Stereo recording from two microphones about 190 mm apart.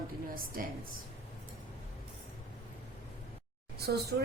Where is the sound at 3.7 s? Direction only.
55° right (ahead or behind).